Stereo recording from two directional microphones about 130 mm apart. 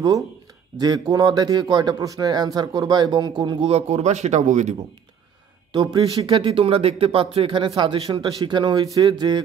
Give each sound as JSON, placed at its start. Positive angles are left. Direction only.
{"t": 0.7, "sound": "speech", "side_deg": -30}
{"t": 3.7, "sound": "speech", "side_deg": -60}
{"t": 5.7, "sound": "speech", "side_deg": -40}